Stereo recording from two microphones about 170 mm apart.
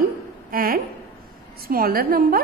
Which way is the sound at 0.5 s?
60° right (ahead or behind).